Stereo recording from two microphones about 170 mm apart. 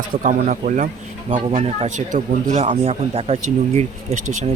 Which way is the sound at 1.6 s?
40° right (ahead or behind).